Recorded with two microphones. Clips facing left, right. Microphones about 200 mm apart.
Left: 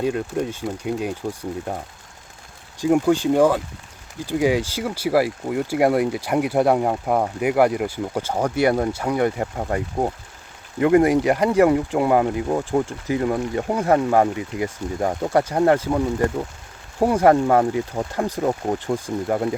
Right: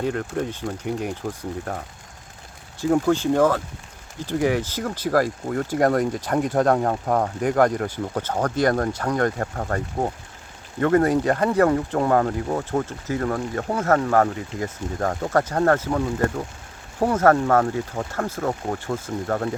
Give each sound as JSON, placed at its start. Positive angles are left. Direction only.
{"t": 0.0, "sound": "speech", "side_deg": 15}
{"t": 2.8, "sound": "speech", "side_deg": 15}